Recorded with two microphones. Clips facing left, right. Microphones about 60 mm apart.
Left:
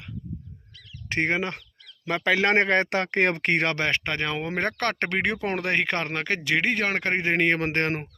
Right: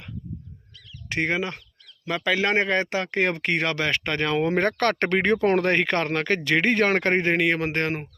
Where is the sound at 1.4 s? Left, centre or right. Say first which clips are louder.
Even; left.